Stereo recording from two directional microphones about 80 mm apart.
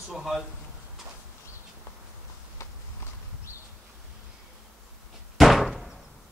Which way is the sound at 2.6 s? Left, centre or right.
Left.